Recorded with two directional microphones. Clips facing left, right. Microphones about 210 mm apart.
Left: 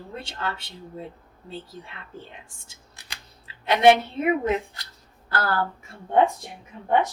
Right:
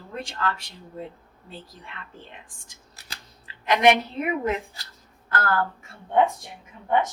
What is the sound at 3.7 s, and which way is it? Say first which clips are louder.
Speech: left 2 dB; 30° left (ahead or behind).